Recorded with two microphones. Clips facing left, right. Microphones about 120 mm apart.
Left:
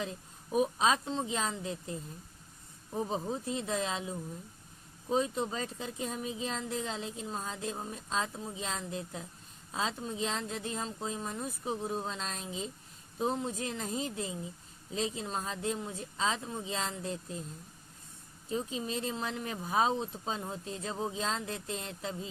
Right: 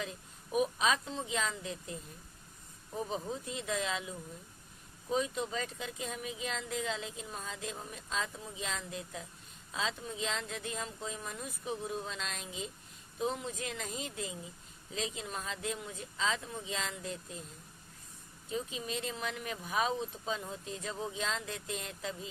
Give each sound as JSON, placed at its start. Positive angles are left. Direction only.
{"t": 0.0, "sound": "speech", "side_deg": 30}
{"t": 3.1, "sound": "speech", "side_deg": 30}
{"t": 18.4, "sound": "speech", "side_deg": 30}